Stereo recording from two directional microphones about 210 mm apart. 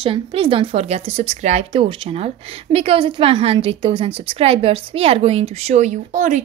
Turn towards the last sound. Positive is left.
turn(degrees=-35)  # may be behind; listen again after turning